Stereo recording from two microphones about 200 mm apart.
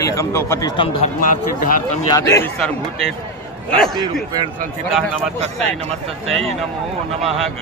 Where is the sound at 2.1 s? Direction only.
15° left (ahead or behind).